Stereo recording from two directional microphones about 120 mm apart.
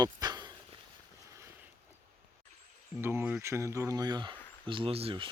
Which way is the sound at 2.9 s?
15° right (ahead or behind).